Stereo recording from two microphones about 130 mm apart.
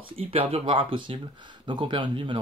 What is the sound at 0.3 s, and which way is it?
Speech, 50° right (ahead or behind).